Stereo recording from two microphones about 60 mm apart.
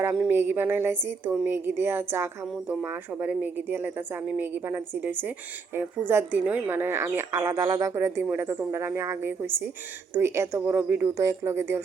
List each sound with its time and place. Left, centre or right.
0.3 s a woman's voice: right
7.0 s speech: right
8.3 s a woman's voice: right
11.0 s speech: right